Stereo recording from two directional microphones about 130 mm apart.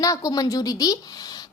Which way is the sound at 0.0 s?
25° left (ahead or behind).